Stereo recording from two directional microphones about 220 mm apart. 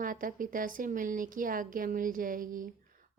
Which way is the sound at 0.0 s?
40° right (ahead or behind).